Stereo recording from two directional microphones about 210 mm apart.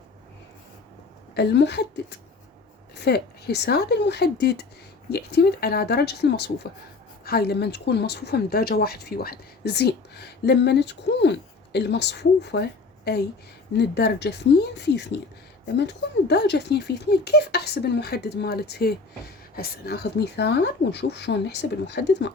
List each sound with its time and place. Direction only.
1.4 s speech: 55° left (ahead or behind)